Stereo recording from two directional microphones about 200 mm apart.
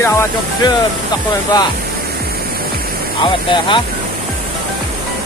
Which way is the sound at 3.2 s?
25° left (ahead or behind).